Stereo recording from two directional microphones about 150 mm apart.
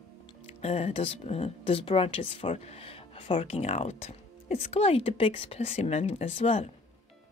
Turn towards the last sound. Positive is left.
turn(degrees=40)  # may be behind; listen again after turning